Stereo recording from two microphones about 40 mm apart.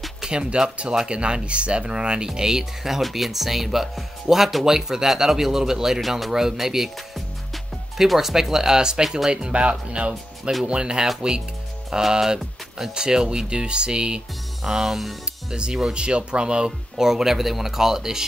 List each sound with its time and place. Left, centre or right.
0.2 s speech: right
5.9 s speech: centre
9.3 s speech: right
14.6 s speech: centre
15.5 s speech: right
16.9 s speech: centre